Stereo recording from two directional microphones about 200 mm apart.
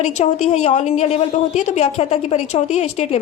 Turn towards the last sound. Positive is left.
turn(degrees=30)  # may be behind; listen again after turning